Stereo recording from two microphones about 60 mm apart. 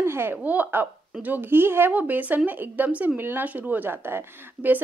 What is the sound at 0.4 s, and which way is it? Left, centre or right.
Speech, right.